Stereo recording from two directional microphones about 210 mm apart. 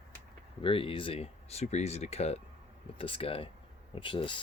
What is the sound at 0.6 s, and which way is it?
Speech, 25° left (ahead or behind).